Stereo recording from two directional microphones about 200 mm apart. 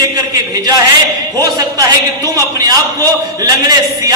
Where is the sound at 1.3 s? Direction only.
20° right (ahead or behind).